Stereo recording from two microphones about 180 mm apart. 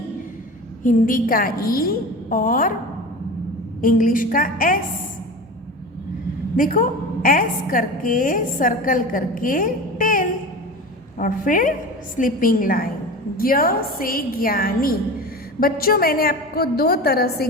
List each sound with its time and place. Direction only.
0.8 s a woman's voice: 50° left (ahead or behind)
3.8 s a woman's voice: 50° left (ahead or behind)
6.6 s a woman's voice: 50° left (ahead or behind)